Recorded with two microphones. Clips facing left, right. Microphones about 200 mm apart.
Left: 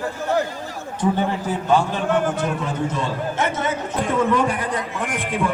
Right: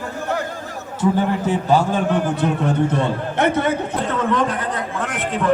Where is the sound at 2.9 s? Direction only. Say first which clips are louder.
Right 3 dB; 60° right (ahead or behind).